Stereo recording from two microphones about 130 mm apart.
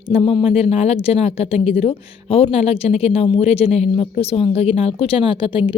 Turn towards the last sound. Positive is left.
turn(degrees=40)  # may be behind; listen again after turning